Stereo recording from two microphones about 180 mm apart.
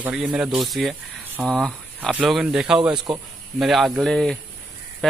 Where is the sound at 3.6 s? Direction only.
Centre (ahead or behind).